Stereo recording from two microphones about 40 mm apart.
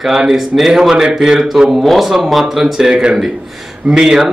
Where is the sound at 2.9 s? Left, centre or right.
Centre.